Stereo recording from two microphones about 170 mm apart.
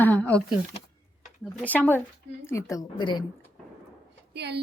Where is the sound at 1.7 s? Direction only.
10° left (ahead or behind); by 3.2 s 25° left (ahead or behind).